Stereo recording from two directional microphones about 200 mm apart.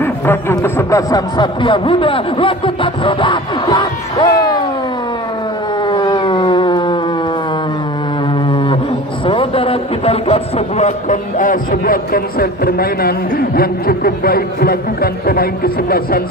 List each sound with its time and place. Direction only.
0.0 s speech: 10° left (ahead or behind)
5.9 s a sound: 25° left (ahead or behind)
9.2 s a man's voice: 25° left (ahead or behind); by 16.2 s 50° left (ahead or behind)